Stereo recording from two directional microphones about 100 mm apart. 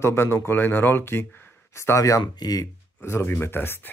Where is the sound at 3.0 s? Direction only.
25° left (ahead or behind).